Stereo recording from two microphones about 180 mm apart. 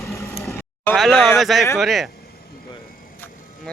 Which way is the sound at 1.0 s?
Centre (ahead or behind).